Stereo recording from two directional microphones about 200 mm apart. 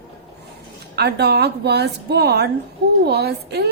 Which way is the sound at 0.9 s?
55° right (ahead or behind).